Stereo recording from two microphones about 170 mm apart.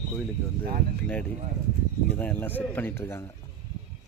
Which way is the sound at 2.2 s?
10° left (ahead or behind).